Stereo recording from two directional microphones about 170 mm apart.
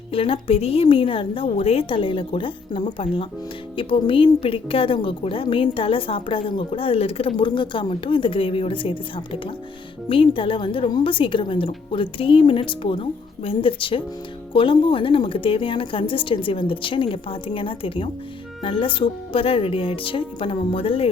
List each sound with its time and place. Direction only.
0.1 s a woman's voice: 35° left (ahead or behind)